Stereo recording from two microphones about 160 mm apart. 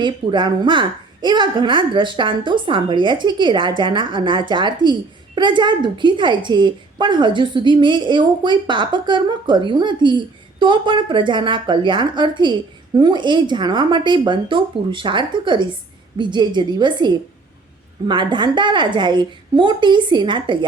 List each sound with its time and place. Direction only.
0.0 s a woman's voice: 30° right (ahead or behind)